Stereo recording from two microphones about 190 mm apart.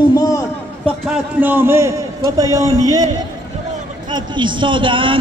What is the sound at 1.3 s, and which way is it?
A man's voice, 10° right (ahead or behind).